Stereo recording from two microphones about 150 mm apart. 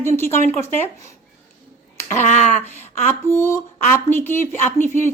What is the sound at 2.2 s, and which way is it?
Speech, 50° left (ahead or behind).